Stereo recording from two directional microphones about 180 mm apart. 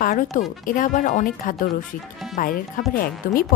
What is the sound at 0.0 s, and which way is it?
Speech, 45° left (ahead or behind).